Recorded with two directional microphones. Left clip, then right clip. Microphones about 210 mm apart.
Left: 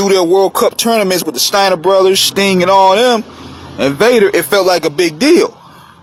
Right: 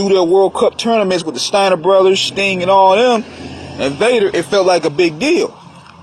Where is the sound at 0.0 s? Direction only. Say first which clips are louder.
Left 1 dB; 40° left (ahead or behind).